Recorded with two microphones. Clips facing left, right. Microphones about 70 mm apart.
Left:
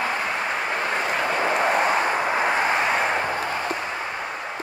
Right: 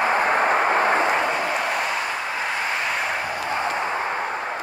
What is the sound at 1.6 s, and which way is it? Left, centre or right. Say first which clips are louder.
Vehicle: left 4 dB; left.